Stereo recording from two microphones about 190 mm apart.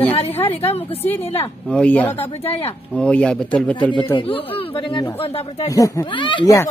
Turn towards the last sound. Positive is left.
turn(degrees=20)  # may be behind; listen again after turning